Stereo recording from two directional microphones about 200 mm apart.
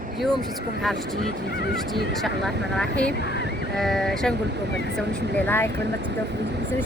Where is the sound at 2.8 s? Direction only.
5° left (ahead or behind).